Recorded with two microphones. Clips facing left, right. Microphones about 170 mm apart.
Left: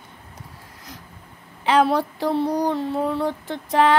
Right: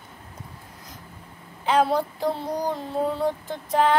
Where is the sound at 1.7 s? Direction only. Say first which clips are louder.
Left 3 dB; 75° left (ahead or behind).